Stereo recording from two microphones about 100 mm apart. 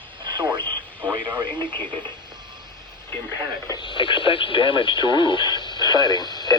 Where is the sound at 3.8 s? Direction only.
55° left (ahead or behind).